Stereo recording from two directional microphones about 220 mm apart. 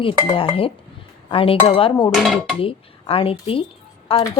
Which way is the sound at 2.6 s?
25° left (ahead or behind).